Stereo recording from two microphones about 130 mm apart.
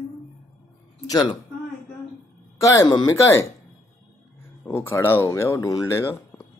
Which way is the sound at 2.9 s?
35° left (ahead or behind).